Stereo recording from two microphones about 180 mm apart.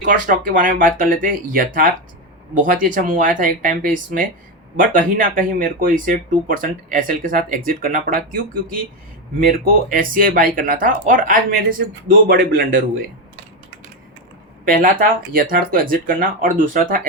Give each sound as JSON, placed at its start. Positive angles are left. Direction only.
{"t": 0.0, "sound": "speech", "side_deg": -45}
{"t": 14.6, "sound": "speech", "side_deg": -50}